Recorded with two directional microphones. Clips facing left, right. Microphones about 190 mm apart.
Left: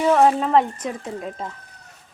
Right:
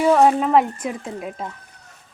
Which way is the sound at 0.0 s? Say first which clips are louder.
Right 1 dB; 5° right (ahead or behind).